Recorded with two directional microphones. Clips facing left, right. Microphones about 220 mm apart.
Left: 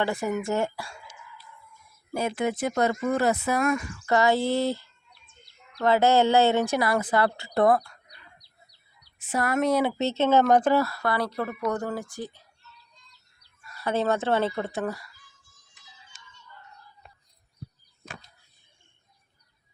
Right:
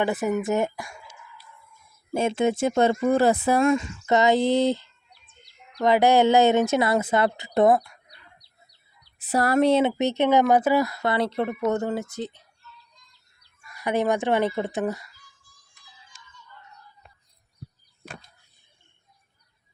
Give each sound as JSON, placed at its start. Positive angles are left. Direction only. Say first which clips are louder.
{"t": 0.0, "sound": "speech", "louder": "right 3 dB", "side_deg": -20}
{"t": 2.1, "sound": "speech", "louder": "right 5 dB", "side_deg": -25}
{"t": 9.1, "sound": "speech", "louder": "right 5 dB", "side_deg": -35}
{"t": 13.6, "sound": "speech", "louder": "right 2 dB", "side_deg": -15}
{"t": 15.7, "sound": "a sound", "louder": "right 1 dB", "side_deg": 20}